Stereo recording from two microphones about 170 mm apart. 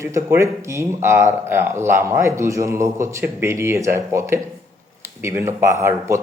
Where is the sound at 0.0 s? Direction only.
15° right (ahead or behind).